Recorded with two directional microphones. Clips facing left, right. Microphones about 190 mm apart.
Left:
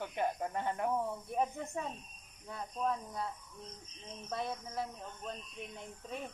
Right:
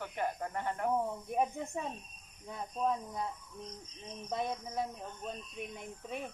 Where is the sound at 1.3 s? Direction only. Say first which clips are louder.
Right 2 dB; 15° right (ahead or behind).